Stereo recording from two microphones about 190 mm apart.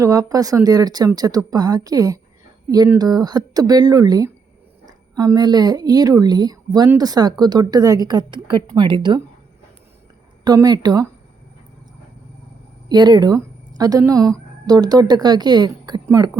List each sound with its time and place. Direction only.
0.0 s a woman's voice: 20° right (ahead or behind)
10.4 s a woman's voice: 20° right (ahead or behind)
12.9 s a woman's voice: 20° right (ahead or behind)